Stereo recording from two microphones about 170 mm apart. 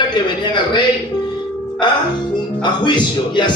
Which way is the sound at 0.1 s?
25° left (ahead or behind).